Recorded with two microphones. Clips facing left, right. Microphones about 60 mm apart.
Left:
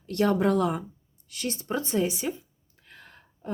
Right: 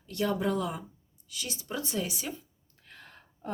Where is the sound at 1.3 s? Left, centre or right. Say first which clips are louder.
Left 7 dB; left.